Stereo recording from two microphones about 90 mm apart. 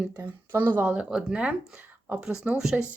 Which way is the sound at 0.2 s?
25° right (ahead or behind).